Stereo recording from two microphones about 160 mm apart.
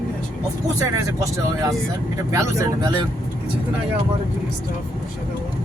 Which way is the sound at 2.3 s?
20° right (ahead or behind).